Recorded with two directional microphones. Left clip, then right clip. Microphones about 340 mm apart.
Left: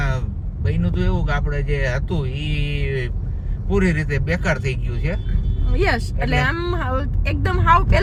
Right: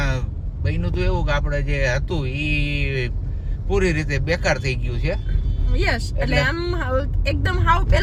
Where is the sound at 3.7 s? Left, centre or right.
Right.